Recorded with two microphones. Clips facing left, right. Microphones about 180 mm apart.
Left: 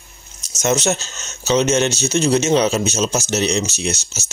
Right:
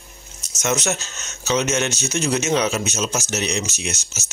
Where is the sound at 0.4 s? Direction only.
35° left (ahead or behind).